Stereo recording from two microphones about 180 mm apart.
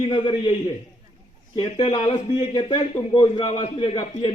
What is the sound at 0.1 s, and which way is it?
Speech, 30° left (ahead or behind).